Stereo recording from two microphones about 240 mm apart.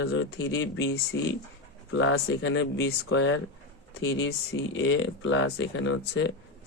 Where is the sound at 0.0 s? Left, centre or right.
Left.